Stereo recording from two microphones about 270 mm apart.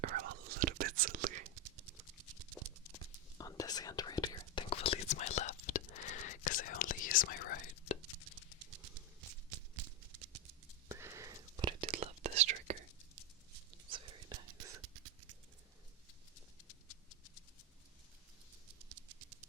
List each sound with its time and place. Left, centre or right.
0.0 s whispering: right
2.9 s whispering: centre; by 7.9 s left
10.8 s whispering: centre
13.9 s whispering: centre